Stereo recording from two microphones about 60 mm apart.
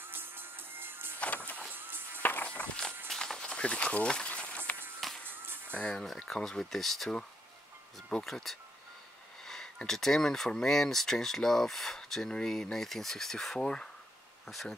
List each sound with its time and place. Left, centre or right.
0.0 s music: right
1.2 s vehicle: left
1.7 s music: right
2.2 s music: left
3.1 s a sound: centre
5.2 s music: right
5.8 s speech: centre